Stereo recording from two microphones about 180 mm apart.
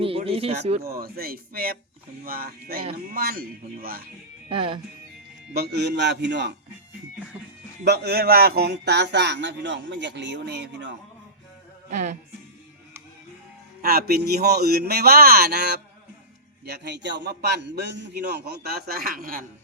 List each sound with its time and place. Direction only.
0.0 s speech: 30° right (ahead or behind)
0.9 s a man's voice: 55° right (ahead or behind)
4.4 s speech: 30° right (ahead or behind)
5.5 s speech: 65° right (ahead or behind)
7.9 s speech: 65° right (ahead or behind)
11.9 s music: 40° right (ahead or behind)
13.8 s a man's voice: 60° right (ahead or behind)